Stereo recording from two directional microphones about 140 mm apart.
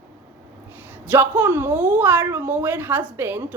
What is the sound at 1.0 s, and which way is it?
A woman's voice, 15° right (ahead or behind).